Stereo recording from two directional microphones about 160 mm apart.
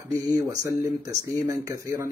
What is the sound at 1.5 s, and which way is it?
Speech, 20° right (ahead or behind).